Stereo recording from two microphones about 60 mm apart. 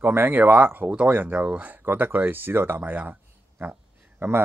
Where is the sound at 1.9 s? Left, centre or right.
Right.